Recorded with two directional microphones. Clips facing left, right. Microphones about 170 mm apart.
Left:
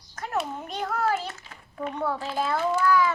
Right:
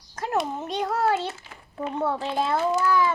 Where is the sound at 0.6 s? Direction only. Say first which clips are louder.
Right 3 dB; 30° right (ahead or behind).